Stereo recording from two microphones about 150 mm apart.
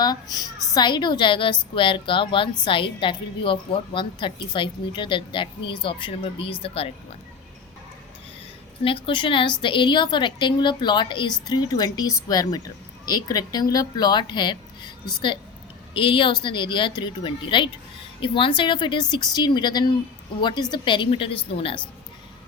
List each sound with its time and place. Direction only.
0.0 s a woman's voice: 25° left (ahead or behind)
9.0 s a woman's voice: 35° left (ahead or behind)